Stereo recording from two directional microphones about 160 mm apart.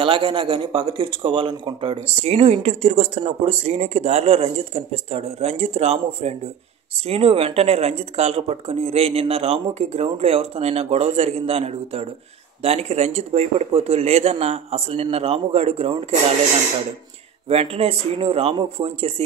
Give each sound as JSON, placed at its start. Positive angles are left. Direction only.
{"t": 0.0, "sound": "speech", "side_deg": -35}
{"t": 17.5, "sound": "speech", "side_deg": -40}